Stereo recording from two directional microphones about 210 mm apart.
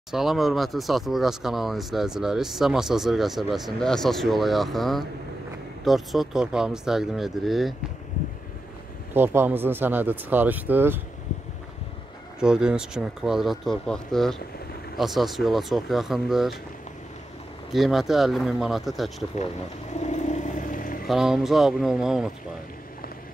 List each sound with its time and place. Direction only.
0.1 s speech: centre (ahead or behind)
9.1 s speech: 10° right (ahead or behind)
12.4 s speech: 5° right (ahead or behind)
17.6 s speech: centre (ahead or behind)
19.9 s vehicle: 35° left (ahead or behind)
21.1 s speech: centre (ahead or behind)